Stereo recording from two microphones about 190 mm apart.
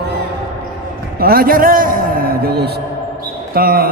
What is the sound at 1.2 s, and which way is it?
A man's voice, 50° right (ahead or behind).